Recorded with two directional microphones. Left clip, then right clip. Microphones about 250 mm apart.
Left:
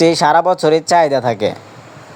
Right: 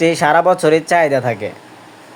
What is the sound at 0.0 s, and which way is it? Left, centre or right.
A man's voice, centre.